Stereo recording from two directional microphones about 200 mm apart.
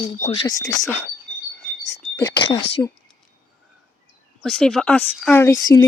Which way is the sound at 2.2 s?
25° left (ahead or behind).